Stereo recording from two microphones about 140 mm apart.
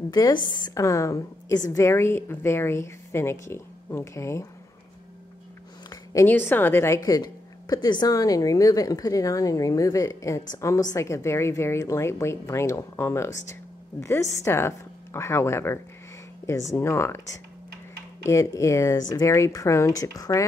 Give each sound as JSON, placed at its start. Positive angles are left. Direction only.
{"t": 0.1, "sound": "a woman's voice", "side_deg": 30}
{"t": 6.2, "sound": "a woman's voice", "side_deg": 15}
{"t": 7.0, "sound": "a woman's voice", "side_deg": 30}